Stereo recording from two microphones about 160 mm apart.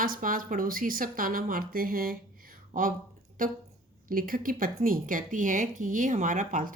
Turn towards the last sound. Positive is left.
turn(degrees=-55)  # may be behind; listen again after turning